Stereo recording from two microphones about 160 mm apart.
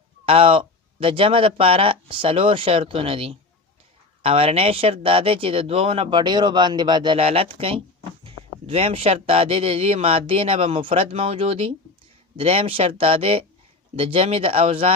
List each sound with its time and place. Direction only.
0.3 s speech: 35° right (ahead or behind)